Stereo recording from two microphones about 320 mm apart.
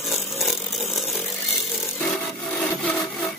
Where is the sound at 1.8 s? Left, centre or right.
Centre.